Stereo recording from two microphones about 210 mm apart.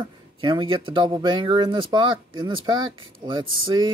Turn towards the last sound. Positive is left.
turn(degrees=-25)  # may be behind; listen again after turning